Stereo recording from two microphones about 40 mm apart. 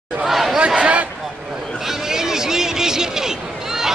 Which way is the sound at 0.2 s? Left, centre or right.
Centre.